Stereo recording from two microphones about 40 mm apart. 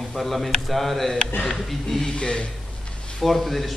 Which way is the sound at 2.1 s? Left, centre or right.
Left.